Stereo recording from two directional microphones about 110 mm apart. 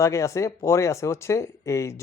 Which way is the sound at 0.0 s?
30° left (ahead or behind).